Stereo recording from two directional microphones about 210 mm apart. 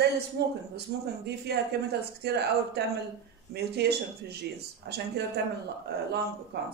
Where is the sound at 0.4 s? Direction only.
50° right (ahead or behind).